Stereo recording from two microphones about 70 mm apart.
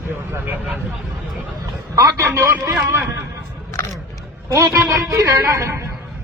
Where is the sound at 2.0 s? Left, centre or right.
Right.